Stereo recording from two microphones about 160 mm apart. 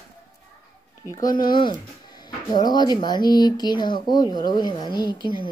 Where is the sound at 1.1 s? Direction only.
25° left (ahead or behind).